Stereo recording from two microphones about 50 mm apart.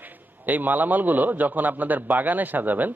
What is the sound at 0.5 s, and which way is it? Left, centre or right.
A man's voice, right.